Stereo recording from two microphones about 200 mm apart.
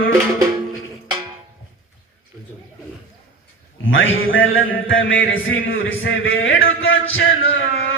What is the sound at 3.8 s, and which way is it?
A man's voice, 75° left (ahead or behind).